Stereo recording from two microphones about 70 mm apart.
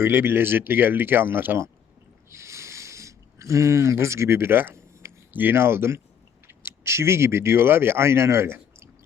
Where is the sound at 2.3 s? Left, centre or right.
Right.